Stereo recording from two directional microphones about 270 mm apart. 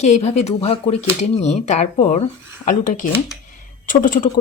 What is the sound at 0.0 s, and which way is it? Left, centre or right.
A woman's voice, left.